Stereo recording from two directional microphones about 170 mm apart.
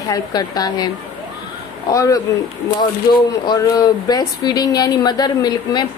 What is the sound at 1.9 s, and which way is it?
Speech, 20° left (ahead or behind).